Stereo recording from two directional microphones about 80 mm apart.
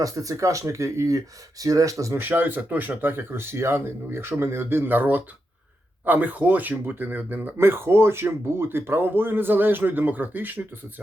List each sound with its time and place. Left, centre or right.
0.0 s speech: right
2.1 s speech: right